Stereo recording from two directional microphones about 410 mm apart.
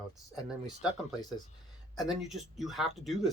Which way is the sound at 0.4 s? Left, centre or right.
Centre.